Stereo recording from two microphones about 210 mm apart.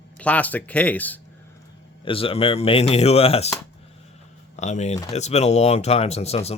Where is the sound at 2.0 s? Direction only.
25° left (ahead or behind).